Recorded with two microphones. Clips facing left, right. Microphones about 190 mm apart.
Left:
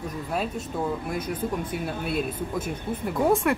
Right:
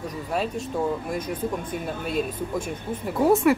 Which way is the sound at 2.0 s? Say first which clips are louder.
Right 3 dB; 5° left (ahead or behind).